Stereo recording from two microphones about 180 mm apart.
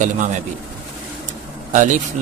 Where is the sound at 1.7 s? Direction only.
45° right (ahead or behind).